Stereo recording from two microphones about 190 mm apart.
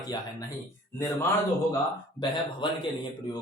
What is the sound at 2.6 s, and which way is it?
Speech, 25° left (ahead or behind).